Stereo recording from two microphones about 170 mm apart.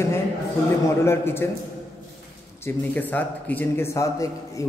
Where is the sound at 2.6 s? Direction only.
10° left (ahead or behind).